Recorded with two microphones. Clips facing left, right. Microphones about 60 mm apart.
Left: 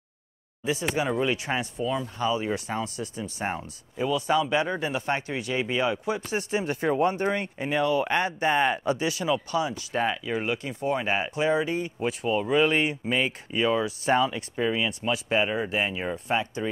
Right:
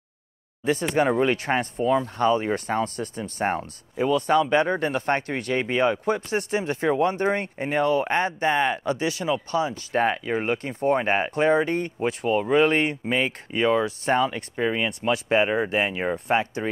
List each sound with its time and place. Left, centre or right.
0.9 s speech: right